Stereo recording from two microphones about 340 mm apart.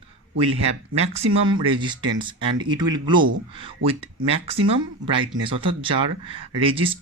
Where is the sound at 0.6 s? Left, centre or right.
Centre.